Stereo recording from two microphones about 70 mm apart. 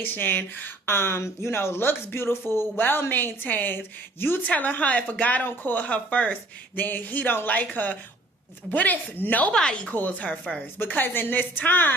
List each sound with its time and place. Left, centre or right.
0.0 s speech: left
9.5 s speech: centre
9.9 s speech: left